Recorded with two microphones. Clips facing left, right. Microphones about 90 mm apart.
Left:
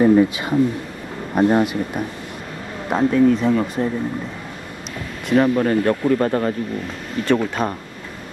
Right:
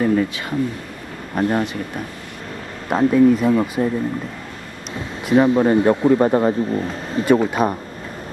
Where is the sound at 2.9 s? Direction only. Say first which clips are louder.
Right 2 dB; 5° right (ahead or behind).